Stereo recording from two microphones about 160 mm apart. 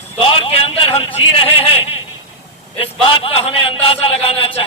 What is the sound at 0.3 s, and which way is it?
A man's voice, 35° left (ahead or behind).